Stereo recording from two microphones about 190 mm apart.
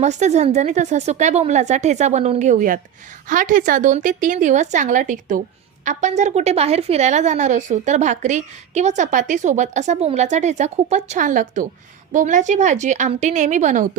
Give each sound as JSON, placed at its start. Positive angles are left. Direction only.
{"t": 0.0, "sound": "a woman's voice", "side_deg": -35}